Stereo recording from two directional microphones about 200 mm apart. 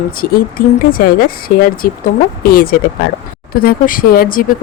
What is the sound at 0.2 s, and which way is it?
Speech, 45° left (ahead or behind).